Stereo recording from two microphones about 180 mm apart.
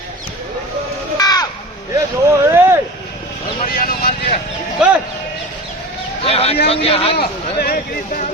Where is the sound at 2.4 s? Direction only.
15° right (ahead or behind).